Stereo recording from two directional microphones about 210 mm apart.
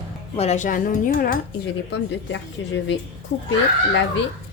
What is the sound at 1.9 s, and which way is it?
Speech, 60° left (ahead or behind).